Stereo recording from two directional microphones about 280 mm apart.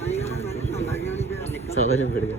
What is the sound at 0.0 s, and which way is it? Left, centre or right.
Vehicle, left.